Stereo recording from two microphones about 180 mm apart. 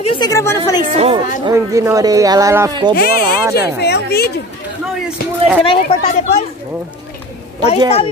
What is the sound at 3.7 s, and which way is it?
Speech, 65° left (ahead or behind).